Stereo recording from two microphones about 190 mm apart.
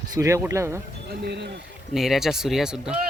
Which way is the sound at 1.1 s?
60° right (ahead or behind).